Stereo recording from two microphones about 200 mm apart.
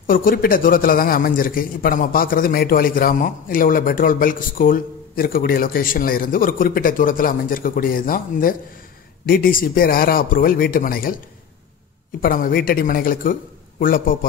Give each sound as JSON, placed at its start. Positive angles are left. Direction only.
{"t": 0.0, "sound": "a man's voice", "side_deg": 45}
{"t": 12.2, "sound": "a man's voice", "side_deg": 45}